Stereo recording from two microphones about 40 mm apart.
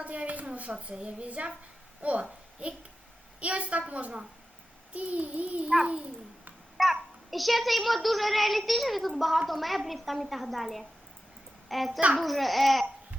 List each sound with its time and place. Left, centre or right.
0.0 s a woman's voice: right
5.6 s a child's voice: right
6.8 s a child's voice: centre